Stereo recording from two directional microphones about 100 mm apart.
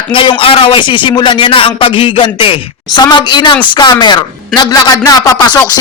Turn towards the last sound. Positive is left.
turn(degrees=40)  # may be behind; listen again after turning